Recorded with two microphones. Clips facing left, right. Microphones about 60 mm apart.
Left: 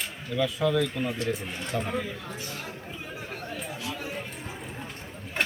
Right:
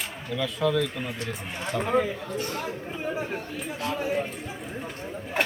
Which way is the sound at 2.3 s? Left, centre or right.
Right.